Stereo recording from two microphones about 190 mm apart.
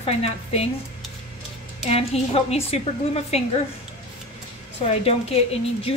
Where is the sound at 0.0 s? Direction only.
35° left (ahead or behind).